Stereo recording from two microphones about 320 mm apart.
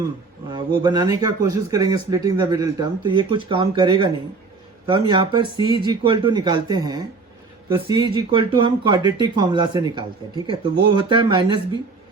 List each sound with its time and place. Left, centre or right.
0.5 s speech: centre